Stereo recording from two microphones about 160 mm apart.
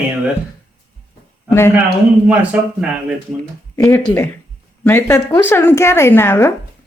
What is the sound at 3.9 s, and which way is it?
Speech, 15° left (ahead or behind).